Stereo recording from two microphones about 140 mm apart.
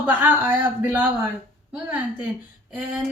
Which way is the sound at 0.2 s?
10° right (ahead or behind).